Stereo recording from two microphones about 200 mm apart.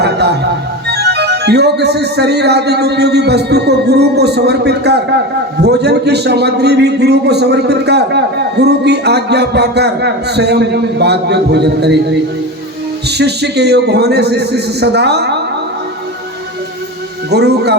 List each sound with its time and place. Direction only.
0.0 s music: 55° right (ahead or behind)
0.9 s a man's voice: 55° right (ahead or behind)
13.1 s a man's voice: 55° right (ahead or behind)
17.3 s a man's voice: 55° right (ahead or behind)